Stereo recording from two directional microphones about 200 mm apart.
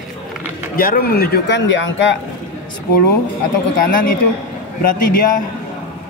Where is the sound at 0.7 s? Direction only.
45° left (ahead or behind); by 2.1 s 65° left (ahead or behind).